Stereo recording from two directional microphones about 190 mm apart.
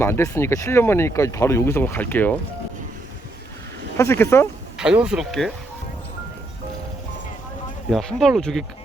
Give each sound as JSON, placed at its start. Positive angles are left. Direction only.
{"t": 0.0, "sound": "speech", "side_deg": 15}
{"t": 3.9, "sound": "speech", "side_deg": 15}
{"t": 4.8, "sound": "speech", "side_deg": -5}
{"t": 7.9, "sound": "speech", "side_deg": 0}